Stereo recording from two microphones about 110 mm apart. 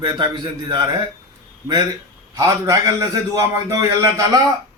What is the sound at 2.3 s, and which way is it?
A man's voice, 30° right (ahead or behind).